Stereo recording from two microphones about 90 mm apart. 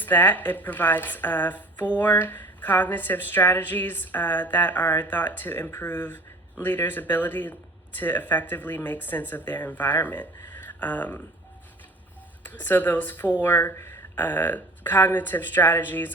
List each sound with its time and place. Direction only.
0.0 s speech: 20° left (ahead or behind)
12.5 s speech: 20° left (ahead or behind)